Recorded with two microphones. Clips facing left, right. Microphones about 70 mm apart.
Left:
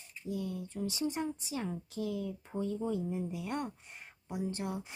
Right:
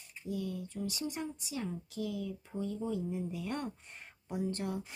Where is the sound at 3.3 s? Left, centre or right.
Centre.